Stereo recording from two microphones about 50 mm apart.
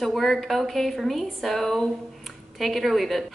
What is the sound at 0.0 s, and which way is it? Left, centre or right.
A woman's voice, centre.